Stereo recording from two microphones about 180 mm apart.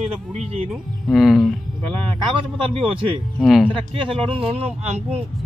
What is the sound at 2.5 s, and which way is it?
Speech, 30° right (ahead or behind).